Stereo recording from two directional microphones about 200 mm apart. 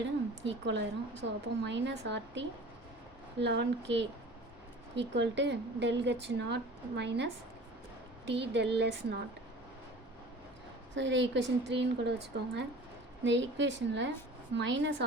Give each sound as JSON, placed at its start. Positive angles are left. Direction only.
{"t": 0.4, "sound": "speech", "side_deg": -60}
{"t": 8.3, "sound": "speech", "side_deg": -60}
{"t": 10.9, "sound": "speech", "side_deg": -65}